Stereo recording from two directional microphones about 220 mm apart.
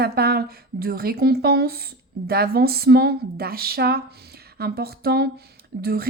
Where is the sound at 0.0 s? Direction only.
45° right (ahead or behind).